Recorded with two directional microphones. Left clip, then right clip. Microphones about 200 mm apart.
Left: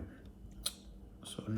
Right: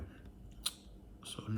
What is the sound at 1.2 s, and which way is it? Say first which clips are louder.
Whispering: left 1 dB; 20° right (ahead or behind).